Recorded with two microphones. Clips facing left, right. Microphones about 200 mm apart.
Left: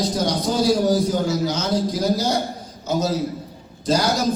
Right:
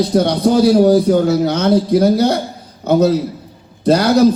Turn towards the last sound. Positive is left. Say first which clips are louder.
# right 9 dB
turn(degrees=-60)  # may be behind; listen again after turning